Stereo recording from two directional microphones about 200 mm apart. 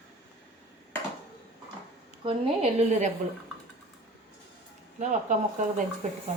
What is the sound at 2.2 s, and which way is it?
Speech, 30° right (ahead or behind).